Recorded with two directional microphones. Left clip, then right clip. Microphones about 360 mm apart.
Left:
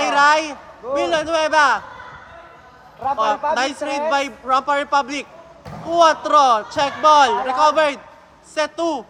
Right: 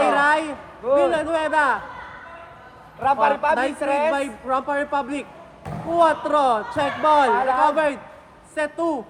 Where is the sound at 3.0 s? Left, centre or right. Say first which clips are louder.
Right 1 dB; right.